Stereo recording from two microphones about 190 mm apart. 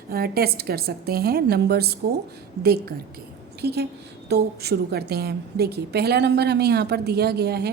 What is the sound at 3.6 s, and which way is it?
A woman's voice, 60° right (ahead or behind).